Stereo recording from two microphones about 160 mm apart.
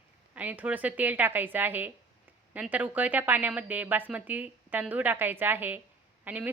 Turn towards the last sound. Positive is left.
turn(degrees=-10)  # may be behind; listen again after turning